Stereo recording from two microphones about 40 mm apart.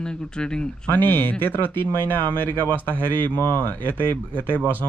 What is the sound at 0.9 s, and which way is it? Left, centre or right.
Speech, left.